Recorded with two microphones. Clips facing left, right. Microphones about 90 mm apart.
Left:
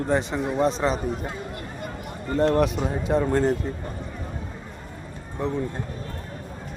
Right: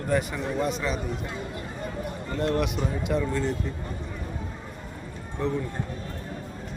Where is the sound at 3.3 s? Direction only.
45° left (ahead or behind).